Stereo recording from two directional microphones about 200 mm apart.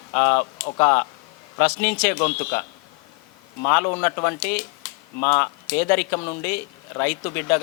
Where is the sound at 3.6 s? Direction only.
15° left (ahead or behind).